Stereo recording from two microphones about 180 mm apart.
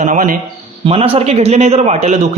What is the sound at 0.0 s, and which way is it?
Speech, 45° right (ahead or behind).